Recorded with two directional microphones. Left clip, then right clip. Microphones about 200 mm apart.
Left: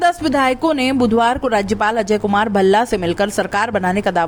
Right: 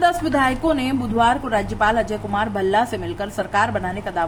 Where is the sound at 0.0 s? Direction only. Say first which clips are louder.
Left 2 dB; 40° left (ahead or behind).